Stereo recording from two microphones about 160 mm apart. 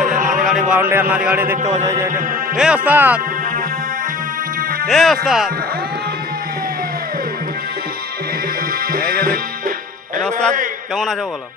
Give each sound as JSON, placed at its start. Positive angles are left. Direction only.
{"t": 0.0, "sound": "a sound", "side_deg": -55}
{"t": 0.7, "sound": "a man's voice", "side_deg": -10}
{"t": 1.9, "sound": "music", "side_deg": -20}
{"t": 2.5, "sound": "a man's voice", "side_deg": -5}
{"t": 4.8, "sound": "speech", "side_deg": 0}
{"t": 8.9, "sound": "music", "side_deg": -65}